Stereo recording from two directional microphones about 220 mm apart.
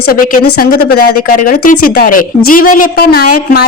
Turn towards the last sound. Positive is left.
turn(degrees=40)  # may be behind; listen again after turning